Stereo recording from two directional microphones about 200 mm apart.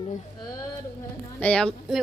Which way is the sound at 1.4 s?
5° left (ahead or behind).